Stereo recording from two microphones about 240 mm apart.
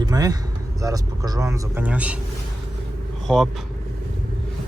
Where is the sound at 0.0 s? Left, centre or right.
Centre.